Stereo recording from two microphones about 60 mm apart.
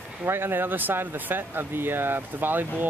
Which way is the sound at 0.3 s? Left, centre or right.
Right.